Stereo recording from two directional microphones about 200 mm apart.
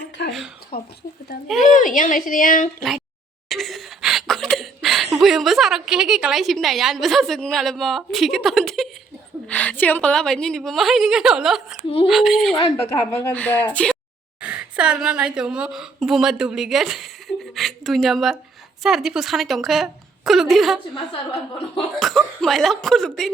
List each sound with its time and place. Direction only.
0.3 s a sound: centre (ahead or behind)
0.7 s a woman's voice: 50° left (ahead or behind)
1.7 s a woman's voice: 40° left (ahead or behind)
3.5 s a woman's voice: centre (ahead or behind)
12.5 s a woman's voice: 15° left (ahead or behind)
14.4 s a woman's voice: 5° right (ahead or behind)
21.9 s speech: centre (ahead or behind)